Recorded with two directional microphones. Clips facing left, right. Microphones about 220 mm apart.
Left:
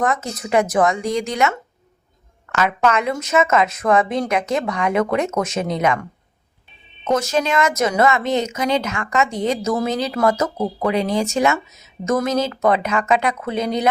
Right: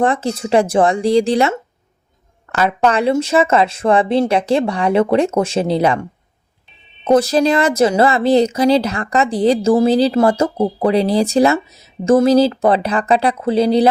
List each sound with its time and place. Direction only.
0.0 s speech: 30° right (ahead or behind)